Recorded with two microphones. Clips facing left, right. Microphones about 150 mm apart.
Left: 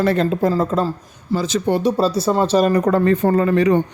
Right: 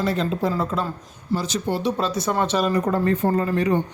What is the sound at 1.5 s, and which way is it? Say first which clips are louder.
Speech: left 6 dB; 60° left (ahead or behind).